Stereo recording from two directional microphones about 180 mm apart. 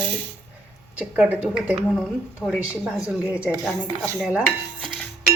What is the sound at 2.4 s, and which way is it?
Music, 5° right (ahead or behind).